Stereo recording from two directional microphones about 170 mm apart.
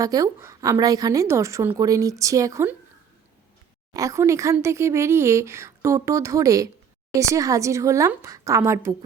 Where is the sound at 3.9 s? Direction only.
20° right (ahead or behind).